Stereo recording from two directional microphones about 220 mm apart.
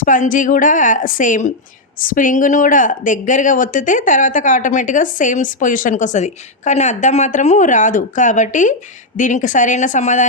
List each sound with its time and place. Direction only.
0.0 s speech: 35° left (ahead or behind)